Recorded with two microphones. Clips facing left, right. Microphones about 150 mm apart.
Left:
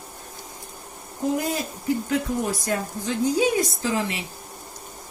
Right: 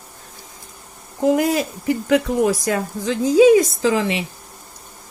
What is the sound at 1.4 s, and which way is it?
Speech, 90° right.